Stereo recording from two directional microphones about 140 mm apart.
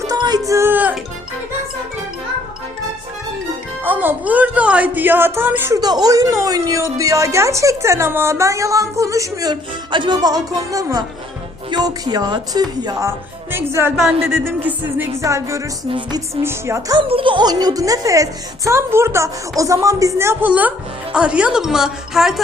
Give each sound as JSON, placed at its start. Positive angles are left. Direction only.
{"t": 0.1, "sound": "music", "side_deg": -25}
{"t": 3.8, "sound": "music", "side_deg": -10}
{"t": 5.8, "sound": "speech", "side_deg": -30}
{"t": 14.2, "sound": "music", "side_deg": -15}
{"t": 15.9, "sound": "music", "side_deg": -35}
{"t": 16.3, "sound": "speech", "side_deg": -20}
{"t": 17.0, "sound": "speech", "side_deg": -40}